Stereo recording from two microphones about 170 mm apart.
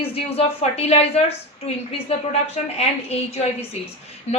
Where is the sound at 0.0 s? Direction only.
35° left (ahead or behind).